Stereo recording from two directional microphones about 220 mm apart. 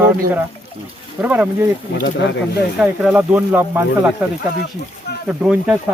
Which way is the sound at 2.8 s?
5° right (ahead or behind).